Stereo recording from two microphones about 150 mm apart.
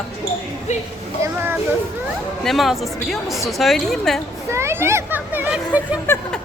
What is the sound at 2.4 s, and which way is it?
A woman's voice, centre (ahead or behind).